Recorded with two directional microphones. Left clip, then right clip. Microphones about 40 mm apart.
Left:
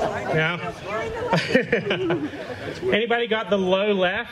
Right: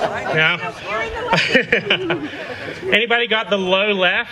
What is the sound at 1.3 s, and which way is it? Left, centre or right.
A man's voice, right.